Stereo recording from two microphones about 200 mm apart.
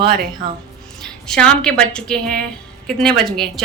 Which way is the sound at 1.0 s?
5° left (ahead or behind).